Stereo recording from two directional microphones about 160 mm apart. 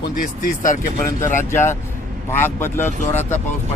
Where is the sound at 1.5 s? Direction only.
15° left (ahead or behind).